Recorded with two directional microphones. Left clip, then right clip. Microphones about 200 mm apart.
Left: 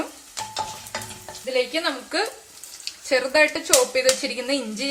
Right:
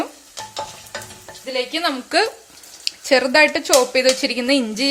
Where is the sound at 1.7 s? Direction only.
45° right (ahead or behind).